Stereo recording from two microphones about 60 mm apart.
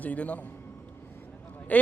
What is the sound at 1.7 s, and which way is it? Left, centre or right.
Speech, left.